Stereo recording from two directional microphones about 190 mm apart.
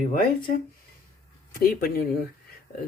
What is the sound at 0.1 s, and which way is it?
Speech, 45° left (ahead or behind).